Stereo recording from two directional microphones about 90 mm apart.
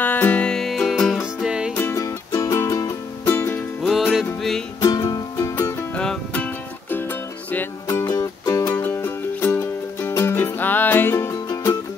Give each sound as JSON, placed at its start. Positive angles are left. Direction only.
{"t": 0.0, "sound": "music", "side_deg": 20}
{"t": 1.2, "sound": "music", "side_deg": -10}
{"t": 2.0, "sound": "music", "side_deg": 40}
{"t": 3.3, "sound": "music", "side_deg": 25}
{"t": 3.8, "sound": "music", "side_deg": -5}
{"t": 4.8, "sound": "music", "side_deg": 45}
{"t": 5.6, "sound": "music", "side_deg": 25}
{"t": 5.9, "sound": "music", "side_deg": 10}
{"t": 8.0, "sound": "music", "side_deg": 40}
{"t": 8.8, "sound": "music", "side_deg": 20}
{"t": 11.4, "sound": "music", "side_deg": 40}